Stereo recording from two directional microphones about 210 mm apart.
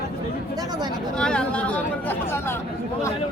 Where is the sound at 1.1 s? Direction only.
5° left (ahead or behind).